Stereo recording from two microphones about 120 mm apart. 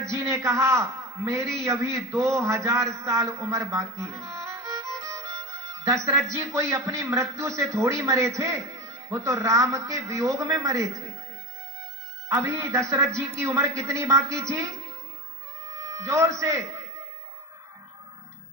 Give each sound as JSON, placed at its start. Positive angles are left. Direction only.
{"t": 0.1, "sound": "a man's voice", "side_deg": -25}
{"t": 12.3, "sound": "a man's voice", "side_deg": -25}